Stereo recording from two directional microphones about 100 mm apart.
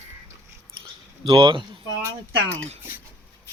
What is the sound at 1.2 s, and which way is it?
Speech, 55° right (ahead or behind).